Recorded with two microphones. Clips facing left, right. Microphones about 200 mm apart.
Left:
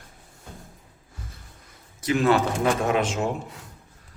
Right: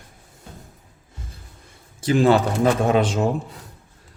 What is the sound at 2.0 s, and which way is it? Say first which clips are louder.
Speech: right 4 dB; 30° right (ahead or behind).